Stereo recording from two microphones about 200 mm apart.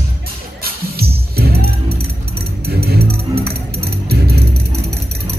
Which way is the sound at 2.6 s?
50° right (ahead or behind).